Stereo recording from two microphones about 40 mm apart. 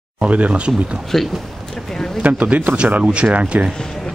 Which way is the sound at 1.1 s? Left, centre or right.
Centre.